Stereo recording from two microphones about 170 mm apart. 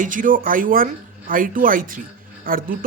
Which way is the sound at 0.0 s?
50° right (ahead or behind).